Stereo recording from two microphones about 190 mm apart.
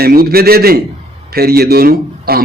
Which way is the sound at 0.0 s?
55° right (ahead or behind).